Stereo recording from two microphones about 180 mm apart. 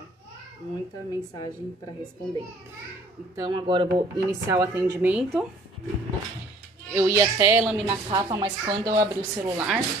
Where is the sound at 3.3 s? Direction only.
25° right (ahead or behind).